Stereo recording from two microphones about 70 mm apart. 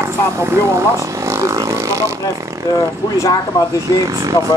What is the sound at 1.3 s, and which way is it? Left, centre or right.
Vehicle, right.